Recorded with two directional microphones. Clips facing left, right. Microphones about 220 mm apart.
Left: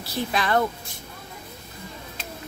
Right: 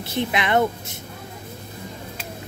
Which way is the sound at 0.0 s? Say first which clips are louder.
Right 3 dB; 20° right (ahead or behind).